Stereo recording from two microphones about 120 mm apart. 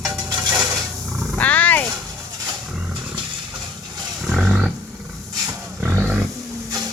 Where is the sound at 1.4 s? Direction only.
10° left (ahead or behind).